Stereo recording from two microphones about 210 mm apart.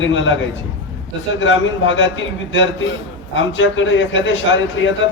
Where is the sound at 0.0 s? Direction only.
65° left (ahead or behind).